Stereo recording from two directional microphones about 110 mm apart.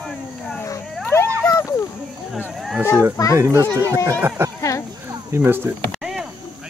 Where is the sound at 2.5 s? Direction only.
Centre (ahead or behind).